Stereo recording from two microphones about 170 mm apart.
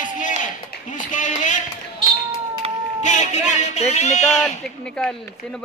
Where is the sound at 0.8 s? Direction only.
50° left (ahead or behind).